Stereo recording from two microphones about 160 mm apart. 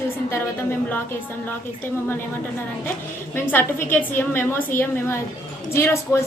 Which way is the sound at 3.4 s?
15° left (ahead or behind).